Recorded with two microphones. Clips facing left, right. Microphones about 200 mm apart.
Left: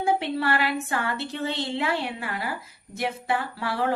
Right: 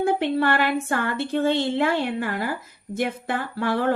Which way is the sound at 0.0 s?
55° right (ahead or behind).